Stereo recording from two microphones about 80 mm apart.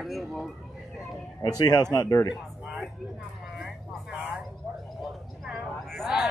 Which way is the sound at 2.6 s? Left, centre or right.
Centre.